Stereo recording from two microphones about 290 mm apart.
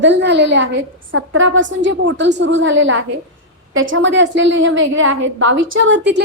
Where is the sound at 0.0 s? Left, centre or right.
Right.